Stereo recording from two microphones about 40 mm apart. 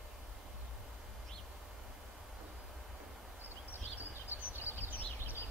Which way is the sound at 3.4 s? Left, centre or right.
Right.